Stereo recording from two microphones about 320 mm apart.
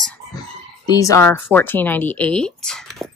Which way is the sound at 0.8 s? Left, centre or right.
Centre.